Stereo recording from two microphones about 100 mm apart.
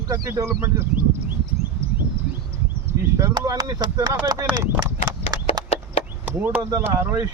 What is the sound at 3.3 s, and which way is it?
Speech, 40° right (ahead or behind).